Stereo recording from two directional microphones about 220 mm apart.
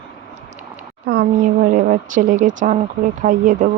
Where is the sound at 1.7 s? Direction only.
35° right (ahead or behind).